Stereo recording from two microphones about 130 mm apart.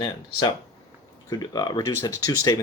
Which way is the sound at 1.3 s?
30° left (ahead or behind).